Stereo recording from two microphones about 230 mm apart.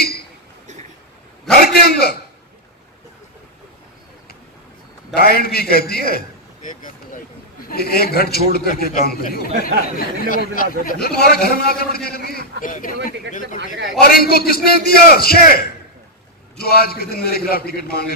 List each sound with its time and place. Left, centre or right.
1.5 s a sound: left
5.1 s a man's voice: left
14.0 s a man's voice: left